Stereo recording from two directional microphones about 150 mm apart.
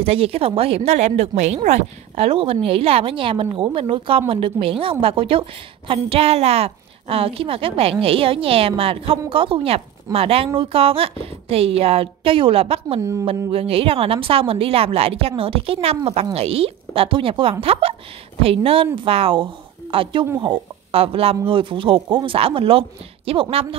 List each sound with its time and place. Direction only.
0.0 s a woman's voice: 40° right (ahead or behind)